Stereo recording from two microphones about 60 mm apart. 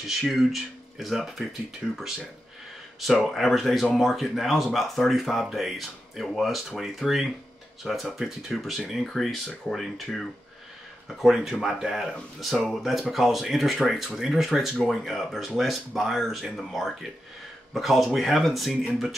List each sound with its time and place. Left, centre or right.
0.0 s speech: centre
1.8 s speech: centre
3.3 s speech: centre